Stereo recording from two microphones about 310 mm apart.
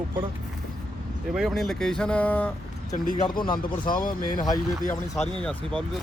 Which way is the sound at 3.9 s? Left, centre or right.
Left.